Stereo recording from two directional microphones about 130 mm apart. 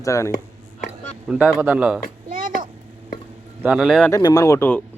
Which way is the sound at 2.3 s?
90° right.